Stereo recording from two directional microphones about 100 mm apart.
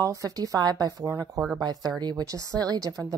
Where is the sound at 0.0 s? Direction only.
35° right (ahead or behind).